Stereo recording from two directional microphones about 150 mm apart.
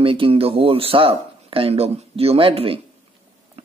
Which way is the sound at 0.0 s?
35° right (ahead or behind).